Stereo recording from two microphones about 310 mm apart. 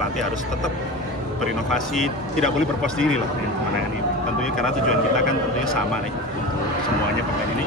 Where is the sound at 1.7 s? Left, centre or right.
Centre.